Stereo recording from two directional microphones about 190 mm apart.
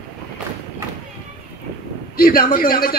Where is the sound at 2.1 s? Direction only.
50° left (ahead or behind).